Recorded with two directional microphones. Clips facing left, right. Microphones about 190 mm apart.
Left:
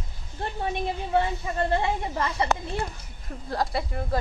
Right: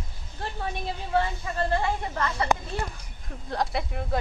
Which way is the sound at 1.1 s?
20° left (ahead or behind).